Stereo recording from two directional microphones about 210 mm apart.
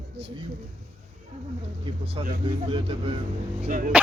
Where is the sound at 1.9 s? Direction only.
25° right (ahead or behind).